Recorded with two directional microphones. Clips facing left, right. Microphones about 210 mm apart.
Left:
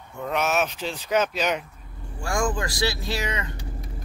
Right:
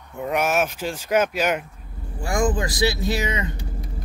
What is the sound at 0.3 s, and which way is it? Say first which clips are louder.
Speech: right 2 dB; 10° right (ahead or behind).